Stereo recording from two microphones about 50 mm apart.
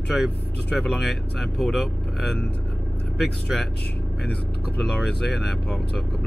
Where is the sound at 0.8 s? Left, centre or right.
Centre.